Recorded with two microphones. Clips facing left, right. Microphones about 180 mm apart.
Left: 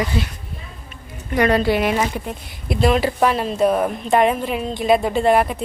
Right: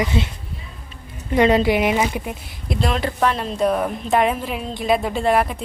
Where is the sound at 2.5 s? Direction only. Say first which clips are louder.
Left 6 dB; 5° left (ahead or behind).